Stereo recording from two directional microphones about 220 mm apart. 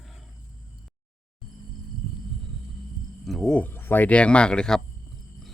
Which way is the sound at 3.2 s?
Centre (ahead or behind).